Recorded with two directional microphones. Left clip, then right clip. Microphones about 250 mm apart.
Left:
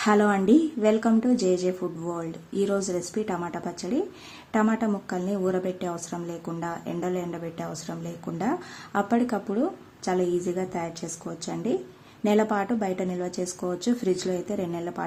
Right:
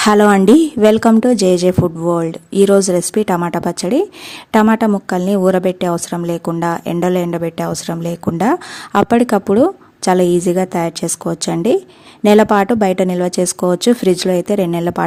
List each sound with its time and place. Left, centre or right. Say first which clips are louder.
0.0 s a woman's voice: right 12 dB; right